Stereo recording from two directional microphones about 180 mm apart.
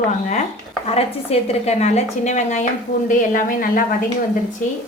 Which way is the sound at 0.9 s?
35° left (ahead or behind).